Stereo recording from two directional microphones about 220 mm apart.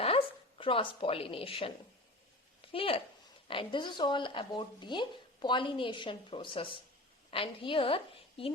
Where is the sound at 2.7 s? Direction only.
25° left (ahead or behind).